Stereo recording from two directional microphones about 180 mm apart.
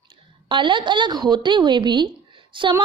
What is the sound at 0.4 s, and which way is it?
A woman's voice, 25° right (ahead or behind).